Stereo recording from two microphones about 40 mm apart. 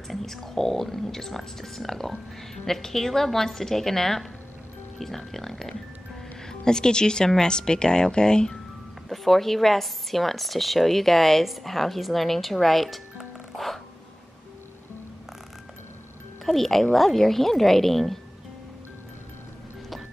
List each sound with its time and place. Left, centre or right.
0.1 s speech: centre
9.1 s speech: centre
16.4 s speech: centre